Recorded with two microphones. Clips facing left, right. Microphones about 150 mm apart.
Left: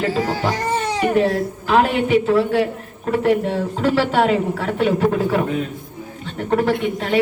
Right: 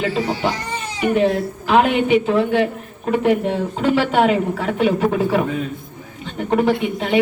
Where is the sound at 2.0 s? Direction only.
20° right (ahead or behind); by 5.2 s 5° right (ahead or behind).